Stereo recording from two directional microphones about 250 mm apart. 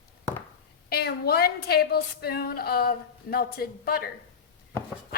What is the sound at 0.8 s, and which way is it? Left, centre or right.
A woman's voice, left.